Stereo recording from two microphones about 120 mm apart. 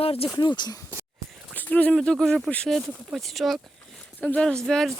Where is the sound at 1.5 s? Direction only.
10° left (ahead or behind).